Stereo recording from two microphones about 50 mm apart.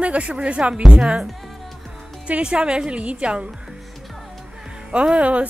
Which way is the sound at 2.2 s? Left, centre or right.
Right.